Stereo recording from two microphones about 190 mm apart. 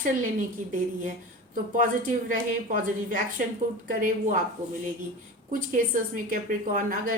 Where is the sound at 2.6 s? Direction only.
45° right (ahead or behind).